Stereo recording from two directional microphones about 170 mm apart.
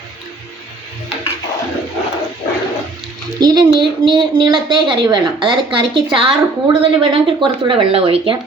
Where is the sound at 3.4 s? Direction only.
25° right (ahead or behind).